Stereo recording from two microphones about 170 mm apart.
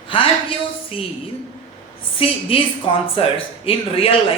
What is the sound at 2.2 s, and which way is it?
Speech, 30° left (ahead or behind).